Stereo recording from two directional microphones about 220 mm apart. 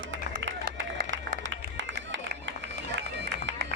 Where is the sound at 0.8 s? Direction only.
55° right (ahead or behind).